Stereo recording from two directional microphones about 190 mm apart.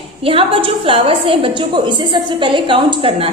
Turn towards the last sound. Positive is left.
turn(degrees=-25)  # may be behind; listen again after turning